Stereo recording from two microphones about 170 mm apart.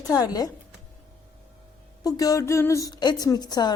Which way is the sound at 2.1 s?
20° left (ahead or behind).